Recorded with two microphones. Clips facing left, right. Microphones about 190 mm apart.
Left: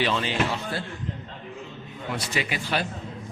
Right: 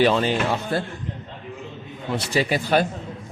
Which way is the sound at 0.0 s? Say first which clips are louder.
Right 6 dB; 45° right (ahead or behind).